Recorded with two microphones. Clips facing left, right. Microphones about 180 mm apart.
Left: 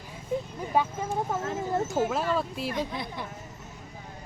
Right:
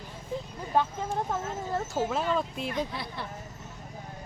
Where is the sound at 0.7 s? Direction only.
10° left (ahead or behind).